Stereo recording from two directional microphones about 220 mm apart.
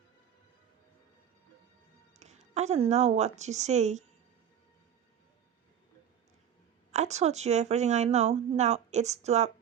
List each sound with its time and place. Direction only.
2.1 s speech: 30° right (ahead or behind)
6.9 s speech: 30° right (ahead or behind)